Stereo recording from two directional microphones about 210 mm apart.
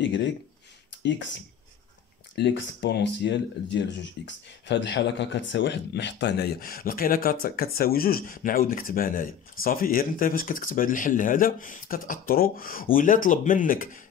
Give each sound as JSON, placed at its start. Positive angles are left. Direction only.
{"t": 0.0, "sound": "speech", "side_deg": 55}
{"t": 2.3, "sound": "speech", "side_deg": 55}